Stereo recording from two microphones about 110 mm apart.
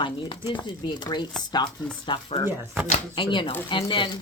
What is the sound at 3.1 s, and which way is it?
Speech, 45° left (ahead or behind).